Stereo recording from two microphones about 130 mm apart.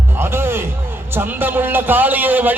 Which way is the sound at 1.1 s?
15° right (ahead or behind).